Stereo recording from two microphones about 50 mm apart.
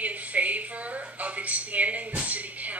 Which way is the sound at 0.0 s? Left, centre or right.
Right.